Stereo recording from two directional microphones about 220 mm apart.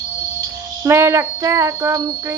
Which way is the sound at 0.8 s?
10° right (ahead or behind).